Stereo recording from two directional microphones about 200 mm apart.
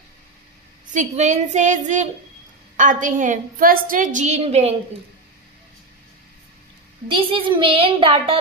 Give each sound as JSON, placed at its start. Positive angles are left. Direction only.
{"t": 0.9, "sound": "a woman's voice", "side_deg": -35}
{"t": 7.1, "sound": "a woman's voice", "side_deg": -25}